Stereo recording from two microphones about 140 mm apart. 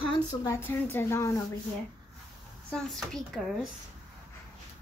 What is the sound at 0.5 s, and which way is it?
Speech, 15° left (ahead or behind).